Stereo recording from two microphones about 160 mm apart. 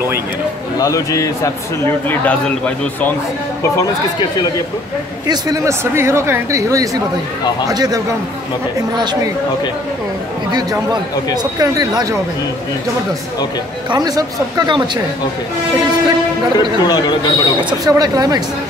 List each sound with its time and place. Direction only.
0.7 s speech: 20° left (ahead or behind)
3.7 s speech: 25° left (ahead or behind)
5.2 s speech: 25° right (ahead or behind)
10.5 s speech: 25° right (ahead or behind)
13.8 s speech: 25° right (ahead or behind)
16.5 s speech: 25° left (ahead or behind)
17.6 s speech: 25° right (ahead or behind)